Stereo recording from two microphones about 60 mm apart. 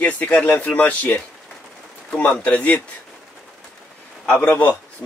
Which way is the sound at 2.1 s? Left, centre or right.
Left.